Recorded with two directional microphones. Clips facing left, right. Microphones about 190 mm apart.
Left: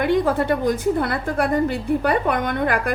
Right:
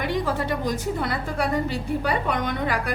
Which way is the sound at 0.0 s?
55° left (ahead or behind).